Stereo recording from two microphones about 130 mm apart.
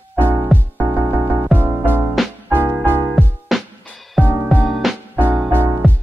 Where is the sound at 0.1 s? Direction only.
15° right (ahead or behind).